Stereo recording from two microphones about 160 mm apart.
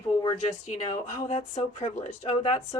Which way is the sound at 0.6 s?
45° left (ahead or behind).